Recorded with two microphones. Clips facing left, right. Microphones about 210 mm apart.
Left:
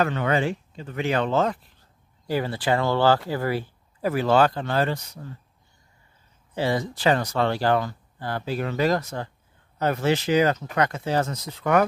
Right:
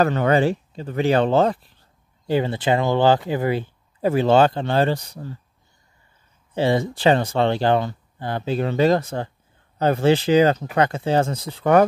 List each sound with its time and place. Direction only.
0.0 s speech: 40° right (ahead or behind)
6.5 s speech: 25° right (ahead or behind)